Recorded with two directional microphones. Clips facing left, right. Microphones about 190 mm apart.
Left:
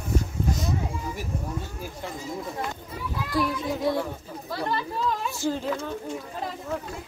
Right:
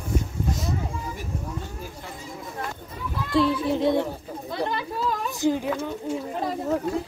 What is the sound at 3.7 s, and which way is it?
A woman's voice, 25° right (ahead or behind).